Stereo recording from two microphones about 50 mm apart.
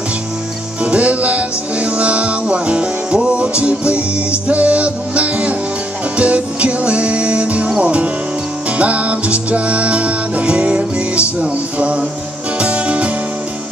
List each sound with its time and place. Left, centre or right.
0.8 s music: right